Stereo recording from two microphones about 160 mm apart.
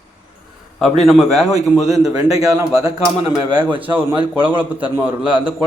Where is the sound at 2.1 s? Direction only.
20° right (ahead or behind).